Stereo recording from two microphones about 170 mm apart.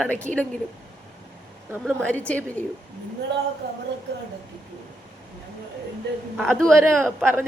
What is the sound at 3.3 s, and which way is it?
Speech, 90° right.